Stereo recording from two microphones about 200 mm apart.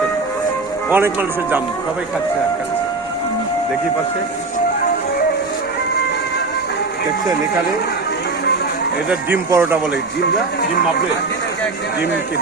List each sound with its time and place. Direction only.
0.9 s speech: 10° right (ahead or behind)
9.0 s speech: 10° right (ahead or behind)
10.2 s speech: 50° left (ahead or behind)